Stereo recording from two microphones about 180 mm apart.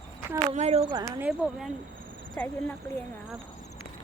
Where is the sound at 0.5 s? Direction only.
35° right (ahead or behind).